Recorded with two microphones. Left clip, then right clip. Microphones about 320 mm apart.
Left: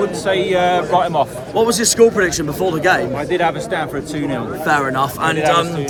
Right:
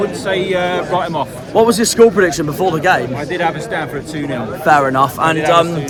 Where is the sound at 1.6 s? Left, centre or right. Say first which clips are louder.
Right 3 dB; centre.